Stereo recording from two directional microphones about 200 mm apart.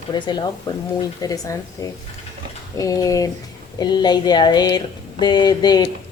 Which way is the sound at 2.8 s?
15° left (ahead or behind).